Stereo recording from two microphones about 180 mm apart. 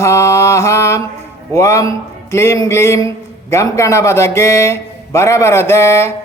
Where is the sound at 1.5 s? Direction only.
20° left (ahead or behind).